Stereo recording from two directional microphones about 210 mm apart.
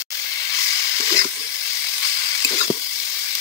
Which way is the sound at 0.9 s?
15° left (ahead or behind).